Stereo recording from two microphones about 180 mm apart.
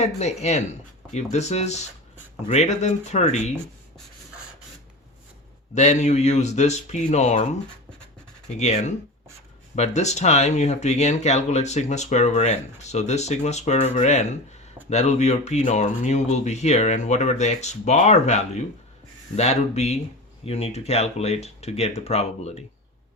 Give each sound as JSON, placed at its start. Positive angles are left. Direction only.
{"t": 0.2, "sound": "speech", "side_deg": 40}
{"t": 5.7, "sound": "speech", "side_deg": 40}
{"t": 8.5, "sound": "speech", "side_deg": 40}